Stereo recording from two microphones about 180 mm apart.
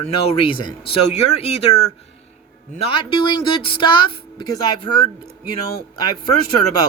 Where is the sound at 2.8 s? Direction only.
30° left (ahead or behind).